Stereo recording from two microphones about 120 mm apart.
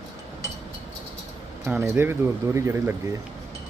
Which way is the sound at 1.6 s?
15° right (ahead or behind).